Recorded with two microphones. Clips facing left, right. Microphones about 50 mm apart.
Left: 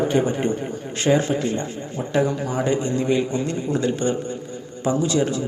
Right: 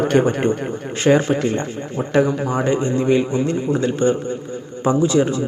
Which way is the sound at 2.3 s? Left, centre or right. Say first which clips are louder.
Right 3 dB; right.